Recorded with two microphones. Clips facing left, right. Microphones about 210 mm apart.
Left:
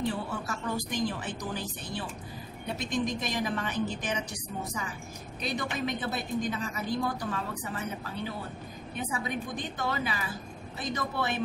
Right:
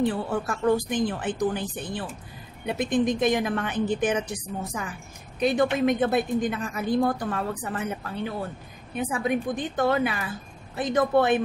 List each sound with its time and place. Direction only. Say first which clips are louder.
0.1 s a woman's voice: right 6 dB; 55° right (ahead or behind)
5.4 s a woman's voice: right 11 dB; 55° right (ahead or behind)